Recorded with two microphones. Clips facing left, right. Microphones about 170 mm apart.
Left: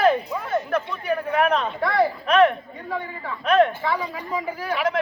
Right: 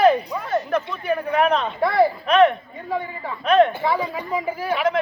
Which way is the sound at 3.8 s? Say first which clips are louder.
Right 3 dB; 25° right (ahead or behind).